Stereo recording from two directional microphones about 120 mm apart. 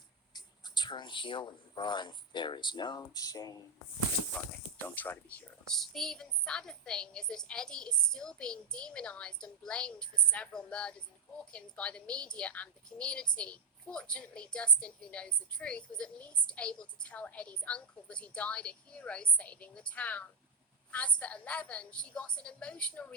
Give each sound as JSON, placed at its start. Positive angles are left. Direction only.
{"t": 0.3, "sound": "speech", "side_deg": 35}
{"t": 4.9, "sound": "a woman's voice", "side_deg": 15}
{"t": 5.7, "sound": "a woman's voice", "side_deg": 5}